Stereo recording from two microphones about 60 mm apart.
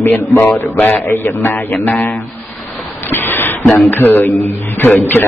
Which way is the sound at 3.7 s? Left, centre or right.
Left.